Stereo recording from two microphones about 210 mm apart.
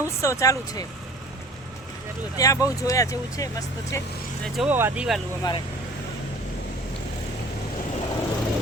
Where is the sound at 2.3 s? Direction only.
15° left (ahead or behind).